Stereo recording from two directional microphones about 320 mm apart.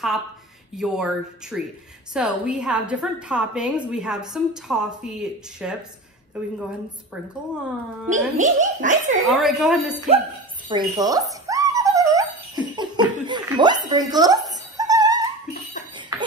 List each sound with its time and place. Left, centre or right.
0.7 s a woman's voice: centre
8.1 s a child's voice: right
9.3 s a woman's voice: centre
9.9 s a child's voice: centre
10.7 s dog: centre
16.1 s cough: centre